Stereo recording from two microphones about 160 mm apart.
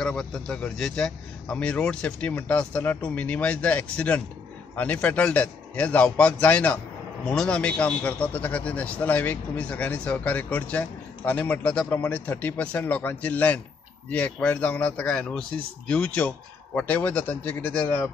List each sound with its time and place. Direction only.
0.0 s a man's voice: 5° left (ahead or behind)